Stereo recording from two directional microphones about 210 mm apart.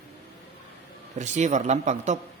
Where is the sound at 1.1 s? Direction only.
35° right (ahead or behind).